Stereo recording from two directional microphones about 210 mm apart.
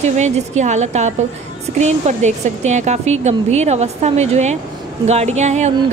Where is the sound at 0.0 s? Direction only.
35° right (ahead or behind).